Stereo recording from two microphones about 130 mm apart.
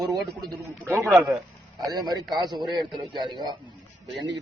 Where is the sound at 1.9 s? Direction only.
35° right (ahead or behind).